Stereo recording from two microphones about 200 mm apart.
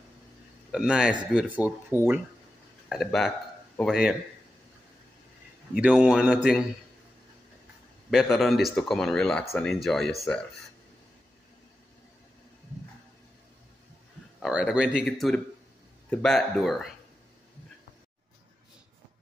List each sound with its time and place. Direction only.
0.7 s speech: 5° right (ahead or behind)
2.9 s speech: centre (ahead or behind)
5.8 s speech: 5° right (ahead or behind)
8.1 s speech: centre (ahead or behind)
14.4 s speech: 5° right (ahead or behind)